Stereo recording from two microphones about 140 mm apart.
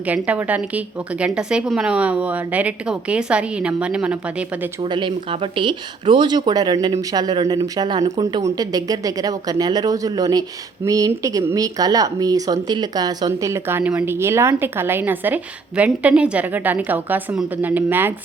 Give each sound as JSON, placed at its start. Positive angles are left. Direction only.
{"t": 0.0, "sound": "speech", "side_deg": -10}
{"t": 4.8, "sound": "speech", "side_deg": -35}